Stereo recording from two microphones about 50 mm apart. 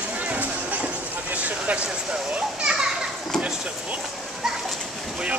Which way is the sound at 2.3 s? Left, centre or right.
Right.